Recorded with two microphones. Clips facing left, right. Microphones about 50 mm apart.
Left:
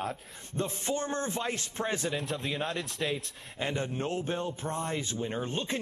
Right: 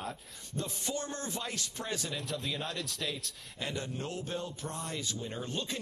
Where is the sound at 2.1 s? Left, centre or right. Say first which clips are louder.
Left 4 dB; left.